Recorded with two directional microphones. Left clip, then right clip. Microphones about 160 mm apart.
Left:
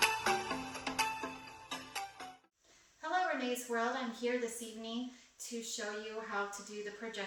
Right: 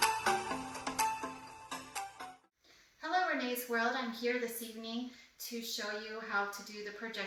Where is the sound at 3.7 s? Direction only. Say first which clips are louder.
Right 2 dB; 10° left (ahead or behind).